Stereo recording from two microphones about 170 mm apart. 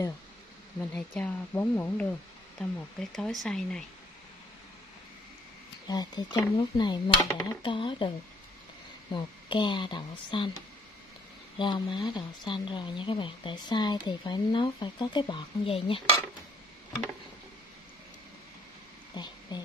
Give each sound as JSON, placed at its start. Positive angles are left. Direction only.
{"t": 0.7, "sound": "speech", "side_deg": 10}
{"t": 5.9, "sound": "speech", "side_deg": 25}
{"t": 9.1, "sound": "speech", "side_deg": 30}
{"t": 11.5, "sound": "speech", "side_deg": 30}
{"t": 19.1, "sound": "a sound", "side_deg": 25}